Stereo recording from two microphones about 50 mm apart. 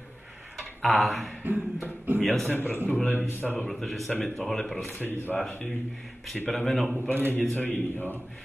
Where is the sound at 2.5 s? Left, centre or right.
Left.